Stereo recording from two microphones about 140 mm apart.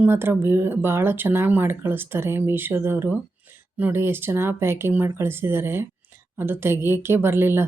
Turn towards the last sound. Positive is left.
turn(degrees=-15)  # may be behind; listen again after turning